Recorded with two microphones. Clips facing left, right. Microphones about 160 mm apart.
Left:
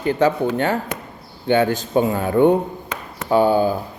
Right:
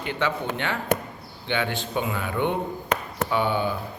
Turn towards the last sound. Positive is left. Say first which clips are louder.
# left 8 dB
turn(degrees=40)  # may be behind; listen again after turning